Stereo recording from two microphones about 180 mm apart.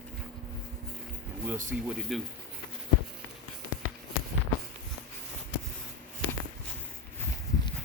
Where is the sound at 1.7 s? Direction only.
5° right (ahead or behind).